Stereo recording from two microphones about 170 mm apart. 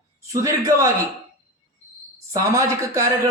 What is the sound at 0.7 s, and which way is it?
Speech, 20° right (ahead or behind).